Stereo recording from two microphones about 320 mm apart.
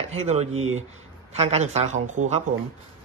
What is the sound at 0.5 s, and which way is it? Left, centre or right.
Speech, right.